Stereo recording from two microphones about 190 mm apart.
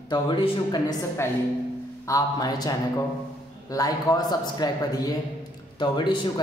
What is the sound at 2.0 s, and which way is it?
A man's voice, 20° left (ahead or behind).